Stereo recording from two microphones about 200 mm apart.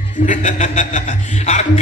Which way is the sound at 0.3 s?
40° left (ahead or behind).